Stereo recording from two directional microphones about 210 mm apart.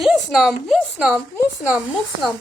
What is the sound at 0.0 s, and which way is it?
A woman's voice, centre (ahead or behind).